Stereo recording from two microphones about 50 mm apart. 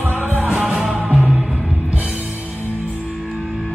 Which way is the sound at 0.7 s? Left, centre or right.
Centre.